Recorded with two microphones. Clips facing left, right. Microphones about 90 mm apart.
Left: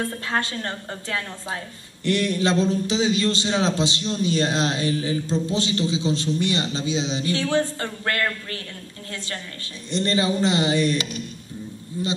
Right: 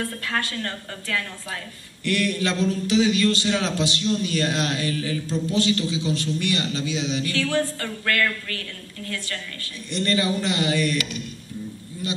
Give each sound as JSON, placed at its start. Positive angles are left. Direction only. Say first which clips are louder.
{"t": 0.0, "sound": "a man's voice", "louder": "left 2 dB", "side_deg": 25}
{"t": 9.8, "sound": "a man's voice", "louder": "left 1 dB", "side_deg": 25}